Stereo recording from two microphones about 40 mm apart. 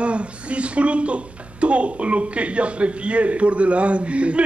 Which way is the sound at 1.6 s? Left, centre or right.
Right.